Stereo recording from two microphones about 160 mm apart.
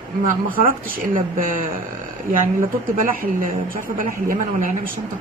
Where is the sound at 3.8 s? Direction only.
60° right (ahead or behind).